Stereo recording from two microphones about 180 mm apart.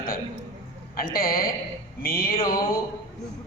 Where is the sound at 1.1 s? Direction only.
55° left (ahead or behind).